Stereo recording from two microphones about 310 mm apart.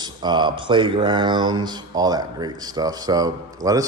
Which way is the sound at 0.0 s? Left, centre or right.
Centre.